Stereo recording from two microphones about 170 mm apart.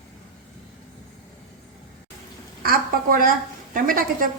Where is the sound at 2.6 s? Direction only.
55° right (ahead or behind).